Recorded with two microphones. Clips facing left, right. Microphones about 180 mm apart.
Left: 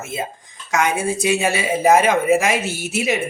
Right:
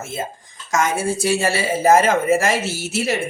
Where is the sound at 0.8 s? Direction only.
15° left (ahead or behind).